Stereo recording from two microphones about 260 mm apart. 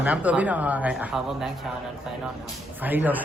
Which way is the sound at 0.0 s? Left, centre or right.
Centre.